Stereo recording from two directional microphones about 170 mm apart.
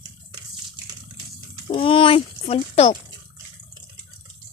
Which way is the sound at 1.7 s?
30° left (ahead or behind).